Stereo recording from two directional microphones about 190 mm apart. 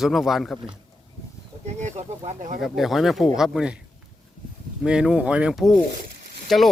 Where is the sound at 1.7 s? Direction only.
35° right (ahead or behind).